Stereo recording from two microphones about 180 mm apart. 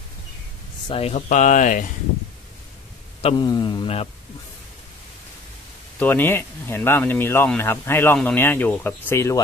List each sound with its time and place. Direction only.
0.8 s speech: 35° left (ahead or behind)
3.2 s speech: 30° left (ahead or behind)
5.9 s speech: 10° left (ahead or behind)